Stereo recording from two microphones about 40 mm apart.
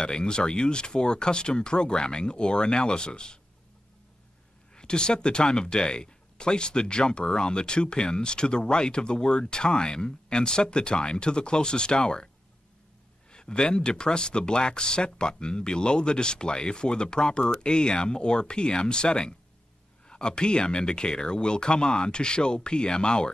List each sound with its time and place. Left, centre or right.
0.0 s speech: left
4.7 s speech: left
13.3 s speech: left